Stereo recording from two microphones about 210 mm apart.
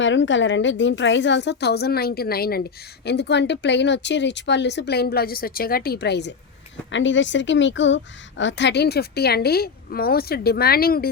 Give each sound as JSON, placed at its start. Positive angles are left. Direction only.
{"t": 0.0, "sound": "a woman's voice", "side_deg": 60}